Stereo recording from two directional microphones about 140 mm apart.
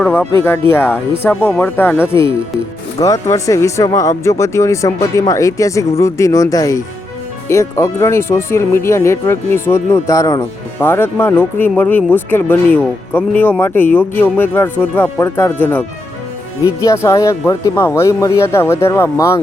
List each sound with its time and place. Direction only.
0.0 s speech: 10° left (ahead or behind)